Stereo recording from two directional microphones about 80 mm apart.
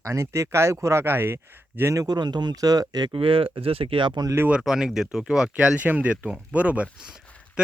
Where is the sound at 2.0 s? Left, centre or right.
Right.